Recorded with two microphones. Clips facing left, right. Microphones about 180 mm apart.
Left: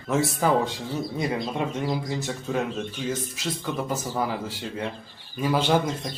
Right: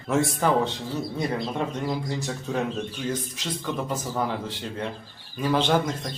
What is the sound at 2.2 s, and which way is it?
Speech, centre (ahead or behind).